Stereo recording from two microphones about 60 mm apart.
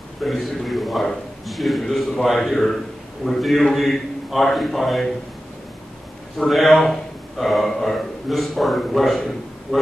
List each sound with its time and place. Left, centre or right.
0.2 s a man's voice: centre
6.3 s speech: centre